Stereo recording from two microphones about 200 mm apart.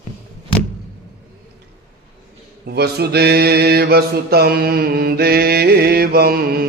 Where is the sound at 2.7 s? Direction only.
55° right (ahead or behind).